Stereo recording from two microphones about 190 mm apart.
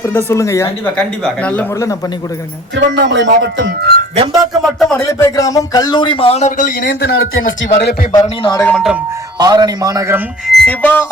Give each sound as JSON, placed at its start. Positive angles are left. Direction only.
{"t": 0.0, "sound": "speech", "side_deg": 15}
{"t": 0.9, "sound": "speech", "side_deg": 5}
{"t": 2.7, "sound": "speech", "side_deg": -65}
{"t": 4.3, "sound": "speech", "side_deg": 0}
{"t": 5.0, "sound": "speech", "side_deg": 15}
{"t": 8.1, "sound": "speech", "side_deg": 20}
{"t": 8.6, "sound": "speech", "side_deg": 0}
{"t": 9.4, "sound": "speech", "side_deg": -20}
{"t": 10.4, "sound": "speech", "side_deg": 0}